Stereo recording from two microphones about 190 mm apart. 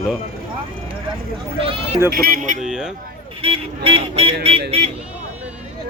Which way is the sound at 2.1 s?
50° right (ahead or behind).